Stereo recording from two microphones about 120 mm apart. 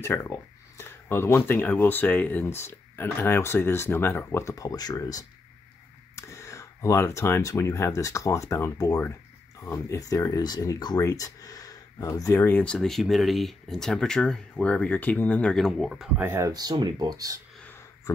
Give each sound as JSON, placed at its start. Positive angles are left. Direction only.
{"t": 0.0, "sound": "speech", "side_deg": 20}
{"t": 16.2, "sound": "speech", "side_deg": -20}